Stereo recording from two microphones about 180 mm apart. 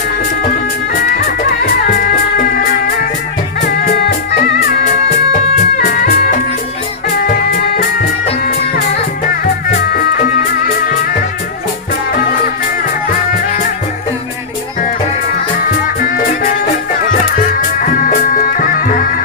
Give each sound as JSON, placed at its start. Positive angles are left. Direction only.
{"t": 0.9, "sound": "music", "side_deg": 50}
{"t": 4.7, "sound": "music", "side_deg": 50}
{"t": 15.6, "sound": "music", "side_deg": 50}
{"t": 17.8, "sound": "music", "side_deg": 50}